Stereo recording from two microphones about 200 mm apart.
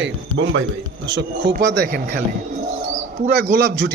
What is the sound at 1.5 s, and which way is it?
Speech, 55° right (ahead or behind).